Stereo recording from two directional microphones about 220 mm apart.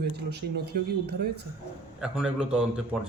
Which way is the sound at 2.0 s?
5° right (ahead or behind).